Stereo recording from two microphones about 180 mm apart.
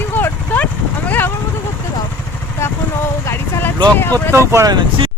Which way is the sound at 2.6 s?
15° left (ahead or behind).